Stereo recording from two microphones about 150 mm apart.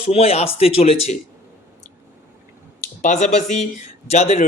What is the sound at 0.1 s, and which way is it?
Speech, 45° left (ahead or behind).